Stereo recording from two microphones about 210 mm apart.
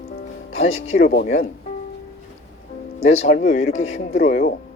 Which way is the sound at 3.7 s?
30° left (ahead or behind).